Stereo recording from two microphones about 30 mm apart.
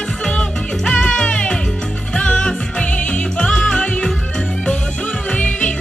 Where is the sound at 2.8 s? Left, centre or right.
Left.